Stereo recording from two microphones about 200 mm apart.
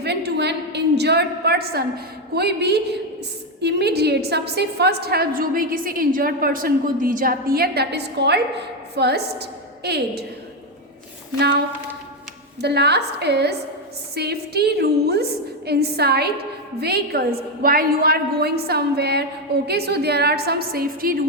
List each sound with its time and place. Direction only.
0.0 s a sound: 55° right (ahead or behind)
2.3 s a woman's voice: 55° right (ahead or behind)
11.3 s a woman's voice: 55° right (ahead or behind)
12.6 s a woman's voice: 55° right (ahead or behind)